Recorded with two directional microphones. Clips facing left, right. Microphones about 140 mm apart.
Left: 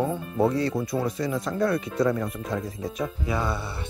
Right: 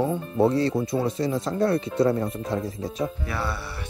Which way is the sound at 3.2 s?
20° left (ahead or behind).